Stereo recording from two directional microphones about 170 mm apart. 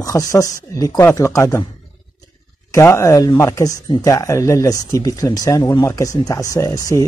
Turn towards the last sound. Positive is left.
turn(degrees=20)  # may be behind; listen again after turning